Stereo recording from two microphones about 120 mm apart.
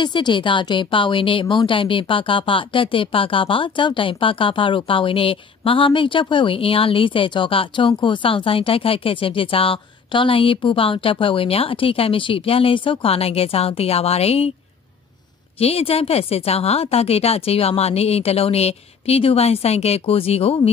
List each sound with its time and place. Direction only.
0.0 s a woman's voice: 40° left (ahead or behind); by 14.5 s 60° left (ahead or behind)
15.6 s a woman's voice: 55° left (ahead or behind)